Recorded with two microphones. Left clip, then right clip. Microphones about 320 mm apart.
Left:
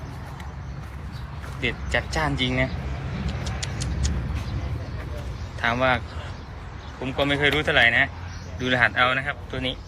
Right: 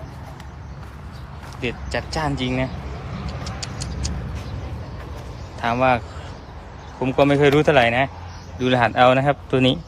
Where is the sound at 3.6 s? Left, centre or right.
Centre.